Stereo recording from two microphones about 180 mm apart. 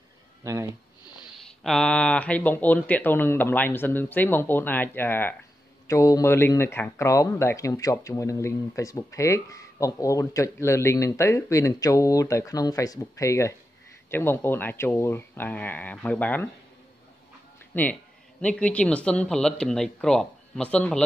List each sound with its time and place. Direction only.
0.4 s speech: 15° right (ahead or behind)
1.6 s speech: 5° left (ahead or behind)
17.7 s speech: 10° left (ahead or behind)